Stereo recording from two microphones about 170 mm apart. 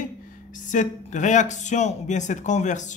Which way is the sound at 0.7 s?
45° left (ahead or behind).